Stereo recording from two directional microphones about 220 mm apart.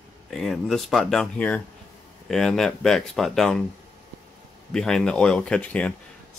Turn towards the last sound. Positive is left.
turn(degrees=5)  # may be behind; listen again after turning